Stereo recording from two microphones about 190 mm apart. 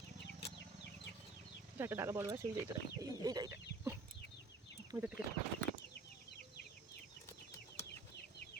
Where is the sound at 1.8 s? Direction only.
10° right (ahead or behind).